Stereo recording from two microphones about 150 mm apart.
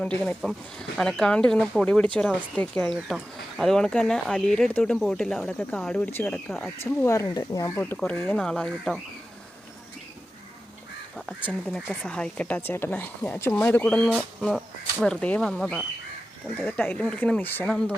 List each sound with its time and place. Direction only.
0.0 s speech: 10° left (ahead or behind); by 7.7 s 25° left (ahead or behind)
7.8 s speech: 10° left (ahead or behind)
11.6 s speech: 5° left (ahead or behind)